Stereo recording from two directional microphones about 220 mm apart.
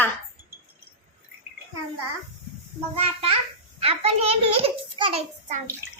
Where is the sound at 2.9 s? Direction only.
25° right (ahead or behind).